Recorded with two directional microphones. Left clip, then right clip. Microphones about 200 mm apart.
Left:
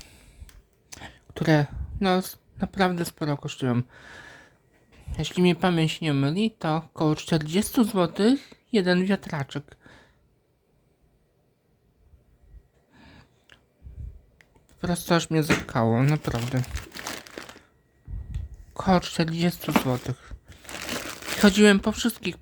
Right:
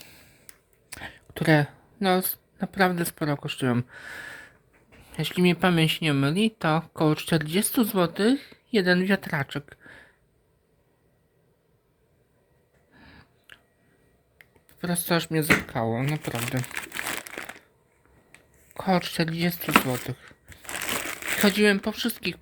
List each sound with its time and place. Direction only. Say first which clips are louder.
0.9 s a woman's voice: right 3 dB; centre (ahead or behind)
12.9 s a sound: right 1 dB; 5° left (ahead or behind)
15.6 s speech: left 4 dB; 20° left (ahead or behind)
18.7 s speech: left 2 dB; 15° left (ahead or behind)
19.8 s crumpling: left 1 dB; 15° left (ahead or behind)
21.3 s speech: left 3 dB; 20° left (ahead or behind)